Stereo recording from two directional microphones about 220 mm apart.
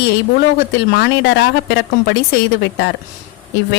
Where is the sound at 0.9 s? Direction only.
50° left (ahead or behind).